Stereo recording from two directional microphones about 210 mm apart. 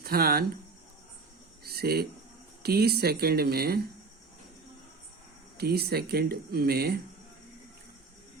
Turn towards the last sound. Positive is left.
turn(degrees=-45)  # may be behind; listen again after turning